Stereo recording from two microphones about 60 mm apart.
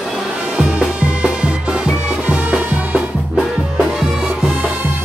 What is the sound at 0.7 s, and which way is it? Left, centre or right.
Music, centre.